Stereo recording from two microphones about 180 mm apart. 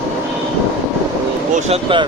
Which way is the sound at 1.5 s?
30° right (ahead or behind).